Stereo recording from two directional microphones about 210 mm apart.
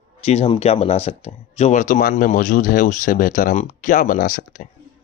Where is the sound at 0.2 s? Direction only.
30° left (ahead or behind).